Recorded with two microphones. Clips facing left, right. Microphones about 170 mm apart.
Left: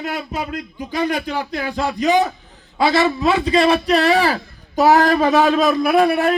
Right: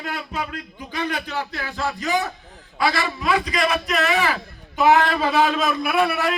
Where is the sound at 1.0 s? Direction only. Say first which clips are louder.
Left 5 dB; 10° left (ahead or behind).